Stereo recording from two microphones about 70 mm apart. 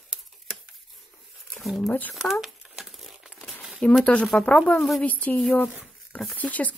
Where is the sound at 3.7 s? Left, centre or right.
Centre.